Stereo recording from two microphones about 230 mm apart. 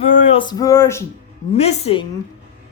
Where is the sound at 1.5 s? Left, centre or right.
Left.